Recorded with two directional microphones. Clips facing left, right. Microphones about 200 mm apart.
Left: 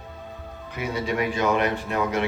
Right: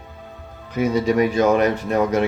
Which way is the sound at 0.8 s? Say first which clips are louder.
Right 8 dB; 40° right (ahead or behind).